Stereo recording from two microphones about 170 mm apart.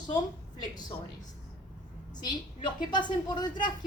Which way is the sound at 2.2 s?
25° left (ahead or behind).